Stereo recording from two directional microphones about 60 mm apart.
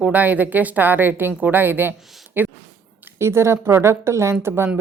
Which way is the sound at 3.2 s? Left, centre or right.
Right.